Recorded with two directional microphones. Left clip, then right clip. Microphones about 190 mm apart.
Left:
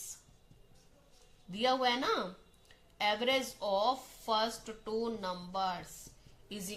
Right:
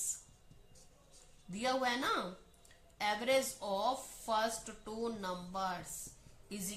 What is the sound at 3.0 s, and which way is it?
Speech, 35° left (ahead or behind).